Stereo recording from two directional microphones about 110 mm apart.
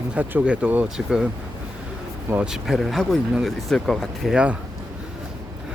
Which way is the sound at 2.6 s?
Centre (ahead or behind).